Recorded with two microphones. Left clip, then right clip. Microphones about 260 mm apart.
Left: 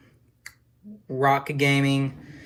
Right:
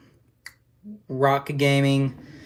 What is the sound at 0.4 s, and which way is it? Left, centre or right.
Tick-tock, centre.